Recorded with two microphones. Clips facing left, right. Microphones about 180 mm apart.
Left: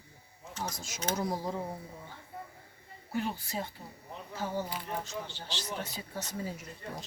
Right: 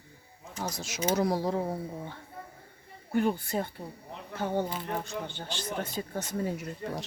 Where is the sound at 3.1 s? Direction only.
55° right (ahead or behind).